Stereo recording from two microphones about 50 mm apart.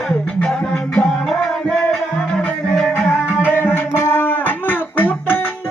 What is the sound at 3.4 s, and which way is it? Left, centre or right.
Music, left.